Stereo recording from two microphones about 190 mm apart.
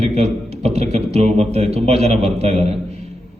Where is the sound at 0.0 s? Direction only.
35° right (ahead or behind).